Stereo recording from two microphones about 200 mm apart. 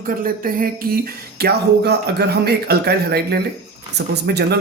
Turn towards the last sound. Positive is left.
turn(degrees=-55)  # may be behind; listen again after turning